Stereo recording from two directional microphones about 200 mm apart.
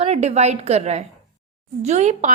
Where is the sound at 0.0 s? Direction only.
35° right (ahead or behind).